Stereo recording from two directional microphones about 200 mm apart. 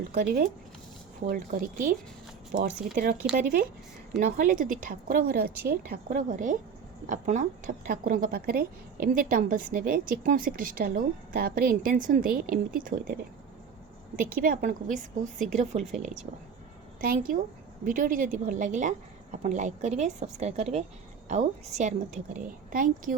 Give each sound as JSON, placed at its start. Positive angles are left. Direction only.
{"t": 0.1, "sound": "a woman's voice", "side_deg": -45}
{"t": 4.3, "sound": "a woman's voice", "side_deg": -45}
{"t": 14.3, "sound": "a woman's voice", "side_deg": -45}
{"t": 17.0, "sound": "a woman's voice", "side_deg": -45}